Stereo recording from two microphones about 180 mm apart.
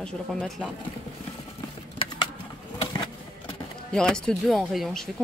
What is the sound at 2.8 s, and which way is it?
Vehicle, 30° left (ahead or behind).